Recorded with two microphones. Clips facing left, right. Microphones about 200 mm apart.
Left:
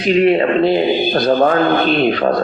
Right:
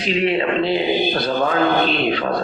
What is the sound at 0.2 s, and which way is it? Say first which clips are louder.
A man's voice: left 6 dB; 50° left (ahead or behind).